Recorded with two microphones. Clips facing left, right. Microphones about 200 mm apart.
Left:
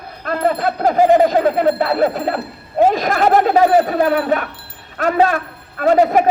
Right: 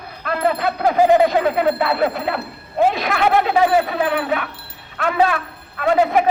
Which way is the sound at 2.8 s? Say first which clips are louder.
Left 3 dB; 40° left (ahead or behind).